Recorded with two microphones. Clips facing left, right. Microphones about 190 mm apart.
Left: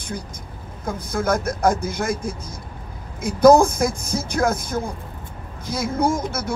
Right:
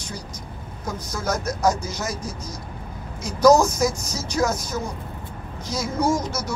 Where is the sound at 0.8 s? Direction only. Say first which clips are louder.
Left 5 dB; 55° left (ahead or behind).